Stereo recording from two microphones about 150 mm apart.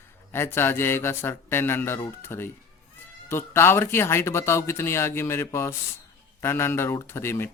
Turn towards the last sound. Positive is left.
turn(degrees=15)  # may be behind; listen again after turning